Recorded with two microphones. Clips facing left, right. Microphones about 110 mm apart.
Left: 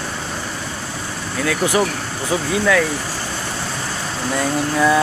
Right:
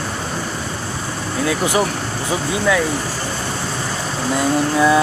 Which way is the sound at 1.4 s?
25° right (ahead or behind).